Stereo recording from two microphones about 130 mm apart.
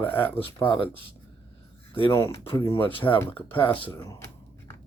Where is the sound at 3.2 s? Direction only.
15° left (ahead or behind).